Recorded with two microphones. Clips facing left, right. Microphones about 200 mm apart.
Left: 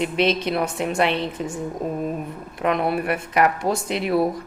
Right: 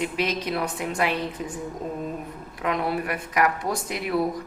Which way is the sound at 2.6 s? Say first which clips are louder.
Left 4 dB; 25° left (ahead or behind).